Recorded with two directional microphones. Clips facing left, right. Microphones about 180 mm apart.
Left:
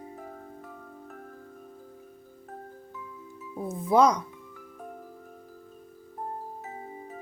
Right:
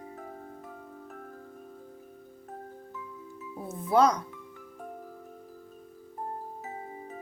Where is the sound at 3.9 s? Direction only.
15° left (ahead or behind).